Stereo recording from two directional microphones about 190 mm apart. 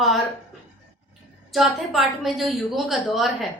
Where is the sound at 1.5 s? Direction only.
Centre (ahead or behind).